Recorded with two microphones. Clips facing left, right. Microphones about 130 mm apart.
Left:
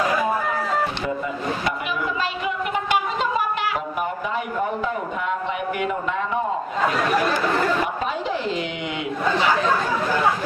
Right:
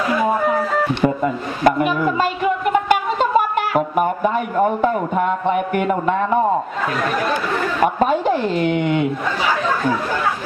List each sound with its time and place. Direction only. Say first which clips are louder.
1.0 s a sound: right 6 dB; 50° right (ahead or behind)
4.8 s speech: right 8 dB; 50° right (ahead or behind)
7.8 s speech: right 9 dB; 50° right (ahead or behind)